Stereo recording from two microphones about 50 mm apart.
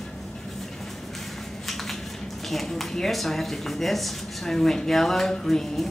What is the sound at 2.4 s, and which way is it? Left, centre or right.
Speech, centre.